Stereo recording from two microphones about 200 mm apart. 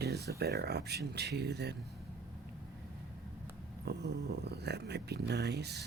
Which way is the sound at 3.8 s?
55° right (ahead or behind).